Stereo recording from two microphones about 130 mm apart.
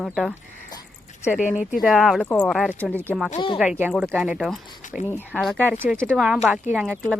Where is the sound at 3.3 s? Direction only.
40° left (ahead or behind).